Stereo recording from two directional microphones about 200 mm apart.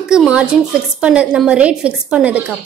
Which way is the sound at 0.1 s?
5° right (ahead or behind).